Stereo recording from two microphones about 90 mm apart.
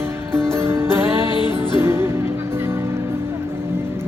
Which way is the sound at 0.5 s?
30° right (ahead or behind).